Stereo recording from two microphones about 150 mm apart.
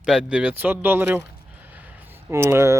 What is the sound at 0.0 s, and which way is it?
Speech, 5° right (ahead or behind).